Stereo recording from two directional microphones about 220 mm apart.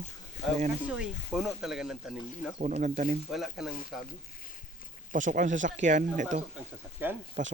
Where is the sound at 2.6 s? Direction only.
35° right (ahead or behind).